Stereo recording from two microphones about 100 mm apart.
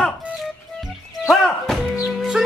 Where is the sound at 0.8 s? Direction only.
5° right (ahead or behind).